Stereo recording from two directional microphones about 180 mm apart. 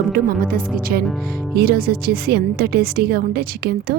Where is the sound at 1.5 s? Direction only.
55° right (ahead or behind).